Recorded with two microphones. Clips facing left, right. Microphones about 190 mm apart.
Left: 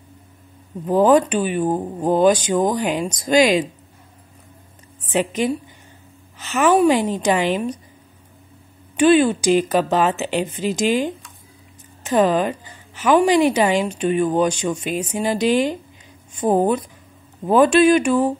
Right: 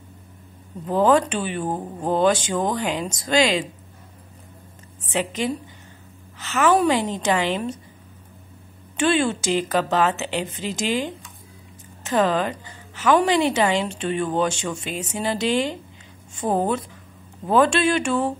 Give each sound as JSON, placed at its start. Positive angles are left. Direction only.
{"t": 0.8, "sound": "a woman's voice", "side_deg": 15}
{"t": 5.2, "sound": "a woman's voice", "side_deg": 15}
{"t": 8.9, "sound": "a woman's voice", "side_deg": 15}
{"t": 12.1, "sound": "a woman's voice", "side_deg": 15}